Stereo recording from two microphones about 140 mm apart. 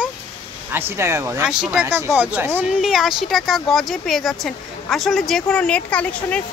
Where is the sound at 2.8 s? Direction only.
Centre (ahead or behind).